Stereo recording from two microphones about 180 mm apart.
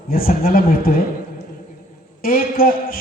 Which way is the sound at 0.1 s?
50° left (ahead or behind).